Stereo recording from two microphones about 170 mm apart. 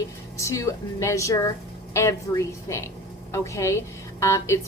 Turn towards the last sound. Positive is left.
turn(degrees=15)  # may be behind; listen again after turning